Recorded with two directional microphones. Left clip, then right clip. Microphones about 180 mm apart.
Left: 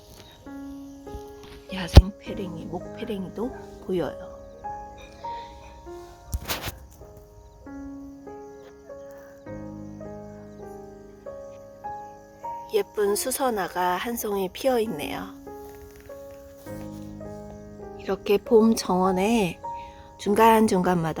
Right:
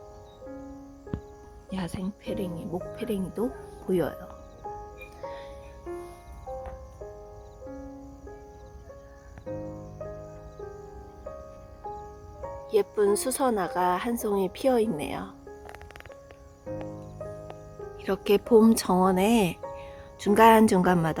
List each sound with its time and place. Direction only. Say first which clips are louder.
1.7 s speech: left 12 dB; 10° right (ahead or behind)
5.2 s music: left 4 dB; 5° right (ahead or behind)
12.6 s a woman's voice: right 1 dB; 20° right (ahead or behind)
17.9 s speech: left 1 dB; centre (ahead or behind)